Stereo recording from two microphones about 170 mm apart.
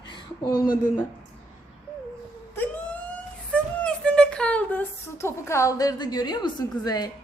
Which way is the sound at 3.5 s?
5° left (ahead or behind).